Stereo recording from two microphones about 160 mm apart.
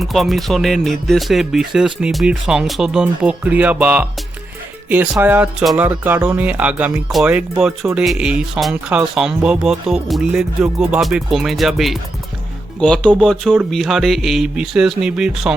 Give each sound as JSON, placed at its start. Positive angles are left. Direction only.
{"t": 0.0, "sound": "speech", "side_deg": 0}